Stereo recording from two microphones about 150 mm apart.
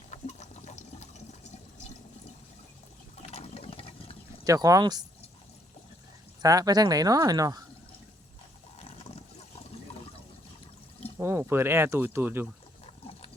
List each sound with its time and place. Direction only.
0.1 s water: 50° left (ahead or behind)
3.2 s a sound: 45° left (ahead or behind)
4.4 s speech: 20° right (ahead or behind)
6.4 s speech: 25° right (ahead or behind)
8.8 s boat: 40° left (ahead or behind)
11.2 s speech: 15° right (ahead or behind)
12.8 s water: 40° left (ahead or behind)